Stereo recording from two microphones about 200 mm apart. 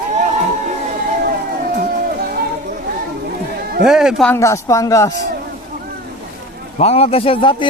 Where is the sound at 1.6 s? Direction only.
45° right (ahead or behind).